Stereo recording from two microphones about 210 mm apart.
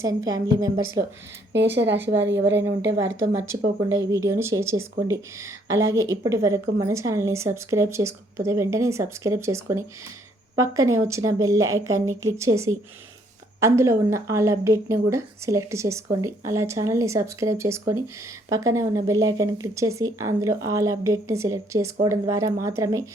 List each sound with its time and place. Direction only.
0.0 s a woman's voice: 15° right (ahead or behind)
1.7 s a woman's voice: 55° right (ahead or behind)
2.8 s a woman's voice: 15° right (ahead or behind)
10.9 s a woman's voice: 15° right (ahead or behind)